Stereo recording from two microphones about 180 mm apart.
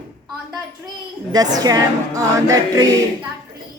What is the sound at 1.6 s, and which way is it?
A capella, 20° right (ahead or behind).